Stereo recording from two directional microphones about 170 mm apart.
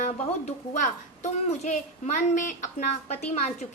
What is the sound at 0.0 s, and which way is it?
A woman's voice, 45° left (ahead or behind).